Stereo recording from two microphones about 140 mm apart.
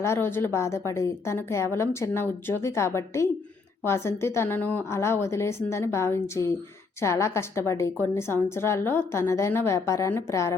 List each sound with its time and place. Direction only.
0.0 s a woman's voice: 15° left (ahead or behind)